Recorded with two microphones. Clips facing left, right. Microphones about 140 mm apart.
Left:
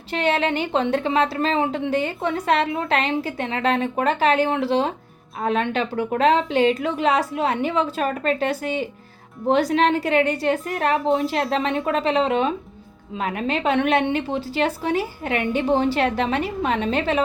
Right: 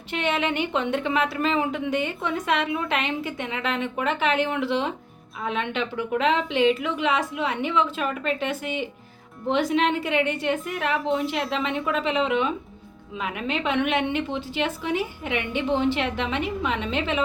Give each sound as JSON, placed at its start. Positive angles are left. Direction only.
{"t": 0.1, "sound": "a woman's voice", "side_deg": 35}
{"t": 11.0, "sound": "a woman's voice", "side_deg": 0}
{"t": 11.5, "sound": "a woman's voice", "side_deg": 35}